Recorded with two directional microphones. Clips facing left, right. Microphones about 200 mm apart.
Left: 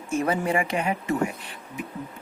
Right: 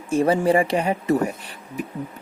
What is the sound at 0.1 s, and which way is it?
Speech, 35° right (ahead or behind).